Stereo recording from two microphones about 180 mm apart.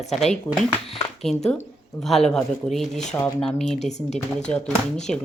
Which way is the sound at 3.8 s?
40° left (ahead or behind).